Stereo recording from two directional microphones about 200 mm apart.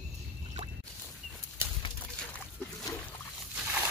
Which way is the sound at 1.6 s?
10° right (ahead or behind).